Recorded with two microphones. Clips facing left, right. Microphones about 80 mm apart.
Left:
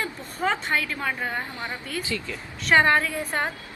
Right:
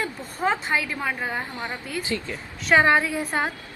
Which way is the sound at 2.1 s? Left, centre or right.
Right.